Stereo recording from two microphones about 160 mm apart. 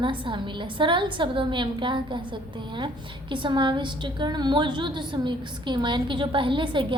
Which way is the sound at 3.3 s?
30° right (ahead or behind).